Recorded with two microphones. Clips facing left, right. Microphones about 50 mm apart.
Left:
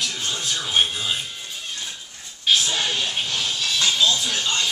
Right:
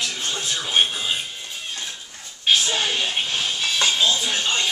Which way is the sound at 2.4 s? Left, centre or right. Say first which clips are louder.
Right 1 dB; centre.